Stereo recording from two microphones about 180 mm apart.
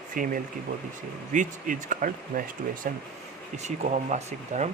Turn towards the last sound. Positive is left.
turn(degrees=-40)  # may be behind; listen again after turning